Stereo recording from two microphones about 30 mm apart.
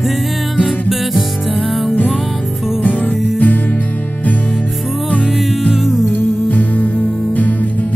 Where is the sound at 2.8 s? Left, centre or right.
Left.